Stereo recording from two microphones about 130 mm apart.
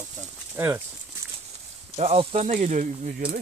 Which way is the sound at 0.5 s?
20° right (ahead or behind).